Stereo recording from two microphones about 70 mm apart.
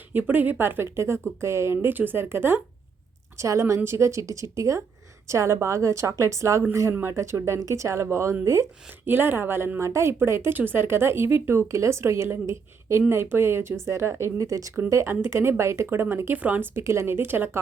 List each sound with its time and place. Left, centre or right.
0.1 s a woman's voice: right
3.3 s a woman's voice: right
9.0 s a woman's voice: right
14.4 s speech: right
15.0 s a woman's voice: right
16.7 s a woman's voice: right